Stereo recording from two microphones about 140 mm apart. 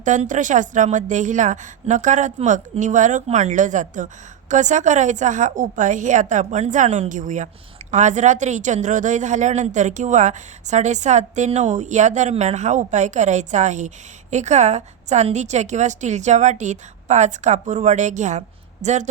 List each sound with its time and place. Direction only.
0.0 s a woman's voice: 65° right (ahead or behind)